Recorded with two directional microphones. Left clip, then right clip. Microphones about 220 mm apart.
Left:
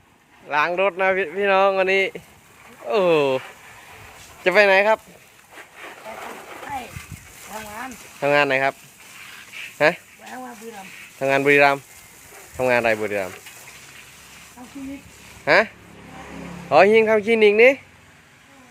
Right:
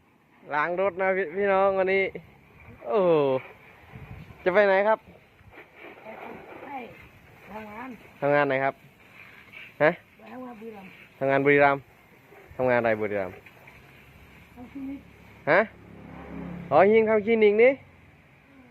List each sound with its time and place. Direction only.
0.4 s speech: 15° left (ahead or behind)
4.4 s speech: 15° left (ahead or behind)
6.2 s splash: 20° left (ahead or behind)
7.5 s speech: 20° left (ahead or behind)
9.7 s speech: 15° left (ahead or behind)
11.2 s speech: 15° left (ahead or behind)
15.4 s speech: 15° left (ahead or behind)